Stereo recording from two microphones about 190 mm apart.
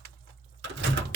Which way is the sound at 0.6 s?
65° right (ahead or behind).